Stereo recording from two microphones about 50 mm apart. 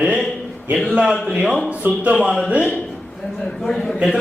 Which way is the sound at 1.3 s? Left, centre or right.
Centre.